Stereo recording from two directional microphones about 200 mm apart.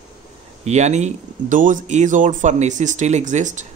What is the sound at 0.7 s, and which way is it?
Speech, 35° right (ahead or behind).